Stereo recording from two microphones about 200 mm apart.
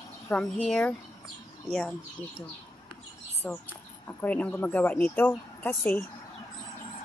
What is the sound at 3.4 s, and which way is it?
Speech, 10° left (ahead or behind).